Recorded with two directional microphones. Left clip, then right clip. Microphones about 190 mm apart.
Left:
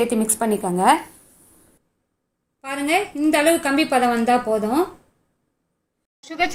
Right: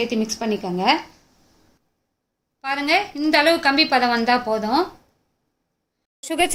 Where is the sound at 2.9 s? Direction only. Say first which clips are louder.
Even; 15° right (ahead or behind).